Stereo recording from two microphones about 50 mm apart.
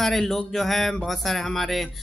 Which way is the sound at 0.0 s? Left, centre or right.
Centre.